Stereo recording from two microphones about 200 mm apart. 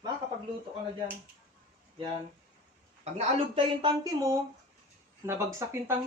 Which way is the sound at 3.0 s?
30° right (ahead or behind).